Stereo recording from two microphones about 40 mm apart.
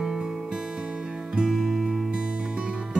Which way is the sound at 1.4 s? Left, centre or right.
Centre.